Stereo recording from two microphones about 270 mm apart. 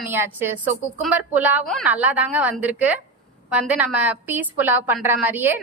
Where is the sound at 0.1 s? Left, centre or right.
Centre.